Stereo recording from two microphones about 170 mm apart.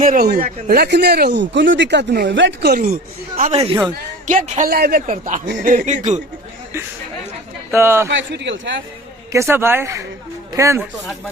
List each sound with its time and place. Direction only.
0.0 s speech: 55° right (ahead or behind)
3.6 s speech: 25° right (ahead or behind)
4.3 s speech: 50° right (ahead or behind)
7.7 s speech: 15° right (ahead or behind)
8.1 s a man's voice: 90° right
9.3 s speech: 15° right (ahead or behind)